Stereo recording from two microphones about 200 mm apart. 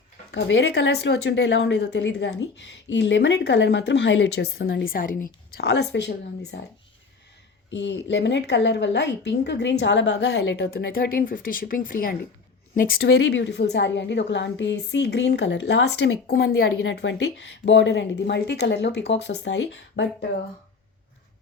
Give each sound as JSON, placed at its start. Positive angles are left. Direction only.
{"t": 0.3, "sound": "a woman's voice", "side_deg": 65}
{"t": 4.6, "sound": "a woman's voice", "side_deg": 45}
{"t": 7.7, "sound": "a woman's voice", "side_deg": 60}
{"t": 16.8, "sound": "a woman's voice", "side_deg": 65}